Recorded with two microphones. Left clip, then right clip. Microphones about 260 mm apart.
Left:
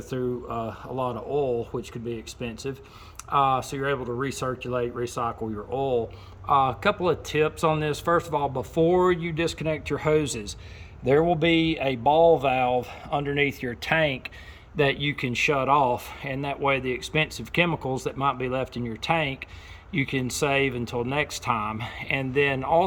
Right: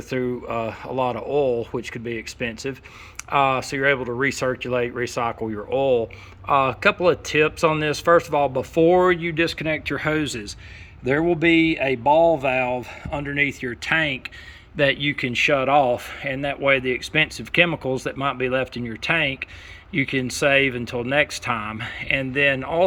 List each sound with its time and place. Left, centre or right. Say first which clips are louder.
0.2 s speech: right 4 dB; right
1.4 s speech: right 5 dB; centre
2.4 s speech: right 5 dB; right
6.6 s speech: right 6 dB; centre
12.0 s speech: right 1 dB; right
13.2 s speech: right 5 dB; centre